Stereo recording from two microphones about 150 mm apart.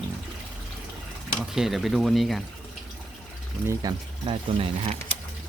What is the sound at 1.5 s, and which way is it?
Speech, centre (ahead or behind).